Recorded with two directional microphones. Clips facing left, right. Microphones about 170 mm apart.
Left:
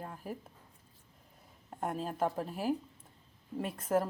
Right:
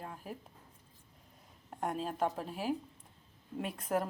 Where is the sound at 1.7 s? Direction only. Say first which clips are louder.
Even; centre (ahead or behind).